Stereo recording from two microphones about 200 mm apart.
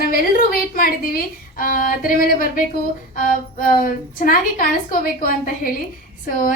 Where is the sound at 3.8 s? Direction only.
45° left (ahead or behind).